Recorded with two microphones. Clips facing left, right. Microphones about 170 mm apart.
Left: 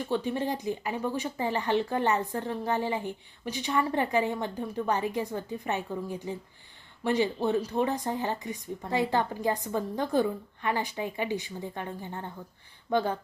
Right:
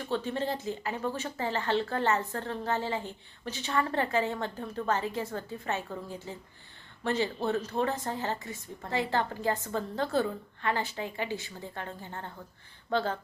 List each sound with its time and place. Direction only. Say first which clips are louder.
0.1 s speech: left 1 dB; 15° left (ahead or behind)